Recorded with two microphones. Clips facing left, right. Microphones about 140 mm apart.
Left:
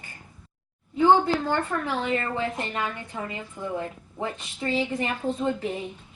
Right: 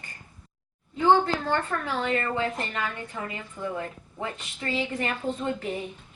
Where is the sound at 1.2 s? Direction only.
15° left (ahead or behind).